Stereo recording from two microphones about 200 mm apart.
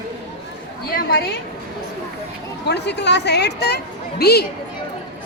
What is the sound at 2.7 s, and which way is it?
A woman's voice, 60° left (ahead or behind).